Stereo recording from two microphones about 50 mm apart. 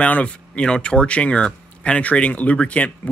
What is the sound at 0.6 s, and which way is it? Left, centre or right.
Speech, centre.